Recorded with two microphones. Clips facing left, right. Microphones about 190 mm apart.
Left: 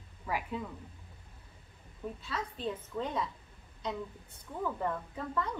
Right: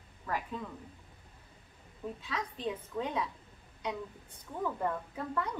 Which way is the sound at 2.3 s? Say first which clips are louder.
Even; 10° right (ahead or behind).